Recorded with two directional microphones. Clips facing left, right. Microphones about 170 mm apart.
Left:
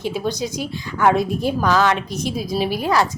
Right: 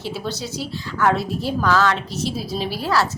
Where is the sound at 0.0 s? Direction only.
15° left (ahead or behind).